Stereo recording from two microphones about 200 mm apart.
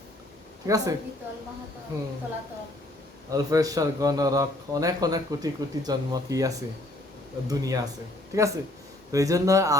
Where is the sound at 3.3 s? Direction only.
15° right (ahead or behind).